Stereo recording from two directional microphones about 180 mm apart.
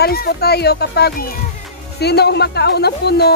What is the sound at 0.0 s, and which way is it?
Speech, 60° left (ahead or behind).